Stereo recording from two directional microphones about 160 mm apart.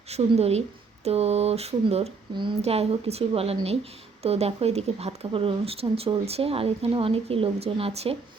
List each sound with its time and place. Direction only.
0.1 s speech: 40° right (ahead or behind)